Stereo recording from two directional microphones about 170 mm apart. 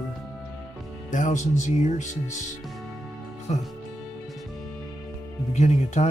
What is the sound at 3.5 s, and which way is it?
Speech, 40° left (ahead or behind).